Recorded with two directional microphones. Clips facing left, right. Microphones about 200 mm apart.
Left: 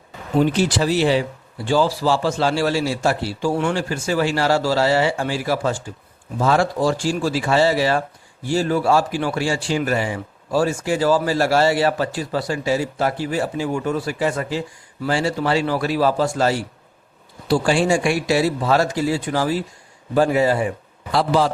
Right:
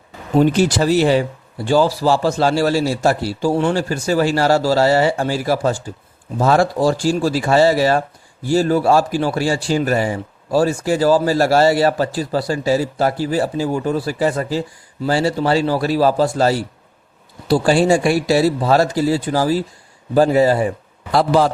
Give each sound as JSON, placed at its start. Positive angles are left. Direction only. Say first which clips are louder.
{"t": 0.3, "sound": "a man's voice", "louder": "right 4 dB", "side_deg": -45}